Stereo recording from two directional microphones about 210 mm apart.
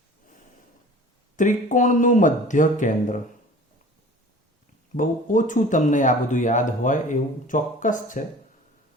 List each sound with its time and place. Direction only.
1.4 s speech: 40° left (ahead or behind)
4.9 s speech: 35° left (ahead or behind)